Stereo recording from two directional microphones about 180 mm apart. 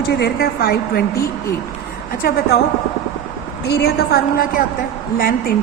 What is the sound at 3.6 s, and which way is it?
A woman's voice, 65° left (ahead or behind).